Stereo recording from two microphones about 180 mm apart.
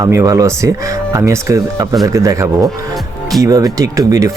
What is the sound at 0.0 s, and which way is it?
Speech, 15° right (ahead or behind).